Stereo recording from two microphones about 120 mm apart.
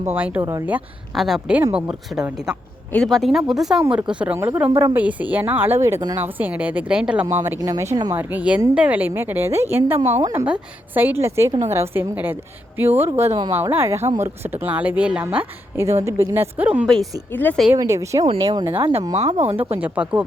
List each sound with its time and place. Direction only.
0.0 s speech: 15° right (ahead or behind)
1.1 s speech: centre (ahead or behind); by 6.1 s 25° right (ahead or behind)
6.1 s speech: 15° right (ahead or behind)
7.4 s speech: 25° right (ahead or behind)
8.1 s speech: 15° right (ahead or behind)
10.0 s speech: 65° right (ahead or behind)
10.4 s speech: 15° right (ahead or behind)
16.8 s speech: centre (ahead or behind)
17.7 s speech: 25° right (ahead or behind)
18.3 s speech: 35° right (ahead or behind)
18.8 s speech: 50° right (ahead or behind)
19.1 s speech: 60° right (ahead or behind)
19.8 s speech: 10° right (ahead or behind)